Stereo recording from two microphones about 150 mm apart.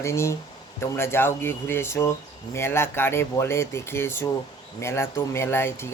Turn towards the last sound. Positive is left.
turn(degrees=15)  # may be behind; listen again after turning